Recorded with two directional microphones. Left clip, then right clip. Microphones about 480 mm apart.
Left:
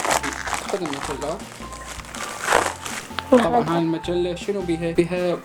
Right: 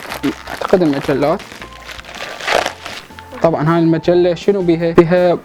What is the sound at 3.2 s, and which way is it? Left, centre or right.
Music, left.